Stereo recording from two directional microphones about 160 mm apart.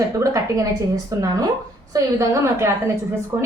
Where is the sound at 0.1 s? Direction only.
20° right (ahead or behind).